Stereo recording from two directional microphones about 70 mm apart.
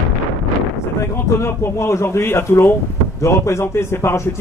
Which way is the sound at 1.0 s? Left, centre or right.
Left.